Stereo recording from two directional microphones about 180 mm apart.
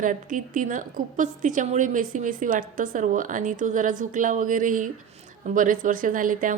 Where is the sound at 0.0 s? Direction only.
45° right (ahead or behind).